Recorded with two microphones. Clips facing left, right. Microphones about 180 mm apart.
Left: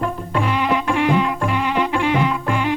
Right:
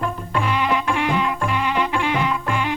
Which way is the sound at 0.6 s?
45° left (ahead or behind).